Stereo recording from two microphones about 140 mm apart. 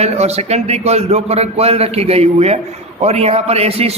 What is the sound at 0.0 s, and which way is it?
A man's voice, 50° right (ahead or behind).